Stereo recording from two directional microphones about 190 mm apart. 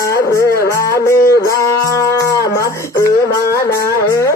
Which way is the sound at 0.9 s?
15° left (ahead or behind).